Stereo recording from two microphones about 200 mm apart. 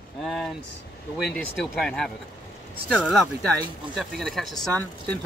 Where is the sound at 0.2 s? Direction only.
Centre (ahead or behind).